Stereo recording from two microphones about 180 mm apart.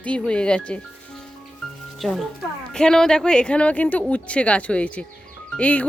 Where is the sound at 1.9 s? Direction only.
Centre (ahead or behind).